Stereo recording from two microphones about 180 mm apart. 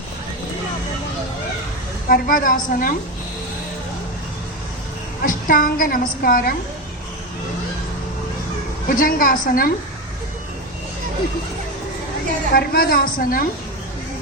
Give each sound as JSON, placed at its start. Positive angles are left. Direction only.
{"t": 2.0, "sound": "a woman's voice", "side_deg": 50}
{"t": 5.2, "sound": "a woman's voice", "side_deg": 50}
{"t": 8.9, "sound": "a woman's voice", "side_deg": 50}
{"t": 12.5, "sound": "a woman's voice", "side_deg": 55}